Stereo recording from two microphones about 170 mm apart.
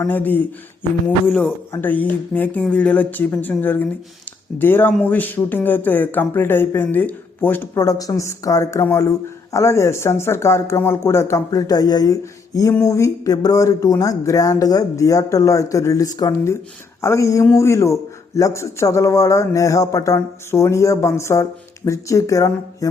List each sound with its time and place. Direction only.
0.0 s speech: 10° left (ahead or behind)